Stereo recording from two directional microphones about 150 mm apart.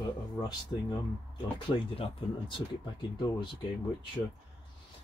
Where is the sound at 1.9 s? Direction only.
35° left (ahead or behind).